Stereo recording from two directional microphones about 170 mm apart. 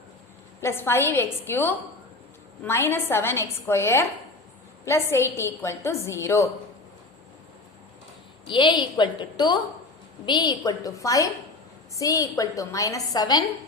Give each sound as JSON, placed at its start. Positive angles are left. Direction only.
{"t": 0.6, "sound": "a woman's voice", "side_deg": 15}
{"t": 8.4, "sound": "a woman's voice", "side_deg": 25}